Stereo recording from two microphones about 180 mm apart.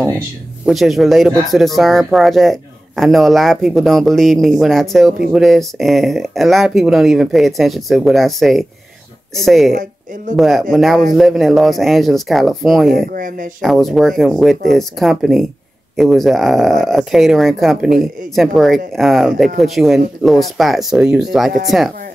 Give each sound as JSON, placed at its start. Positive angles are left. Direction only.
{"t": 0.7, "sound": "speech", "side_deg": 0}
{"t": 9.7, "sound": "speech", "side_deg": -50}
{"t": 10.3, "sound": "speech", "side_deg": 0}
{"t": 12.9, "sound": "speech", "side_deg": -50}
{"t": 13.6, "sound": "speech", "side_deg": 0}